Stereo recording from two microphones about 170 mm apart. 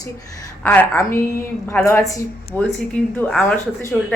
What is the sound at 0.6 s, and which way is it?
A woman's voice, 10° left (ahead or behind).